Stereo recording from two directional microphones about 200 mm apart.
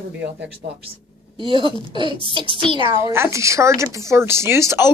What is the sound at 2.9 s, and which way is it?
A woman's voice, 10° right (ahead or behind).